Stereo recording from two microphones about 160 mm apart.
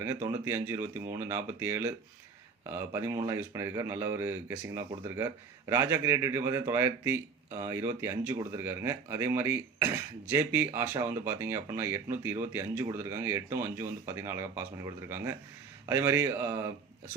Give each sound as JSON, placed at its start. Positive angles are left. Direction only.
{"t": 0.0, "sound": "speech", "side_deg": -15}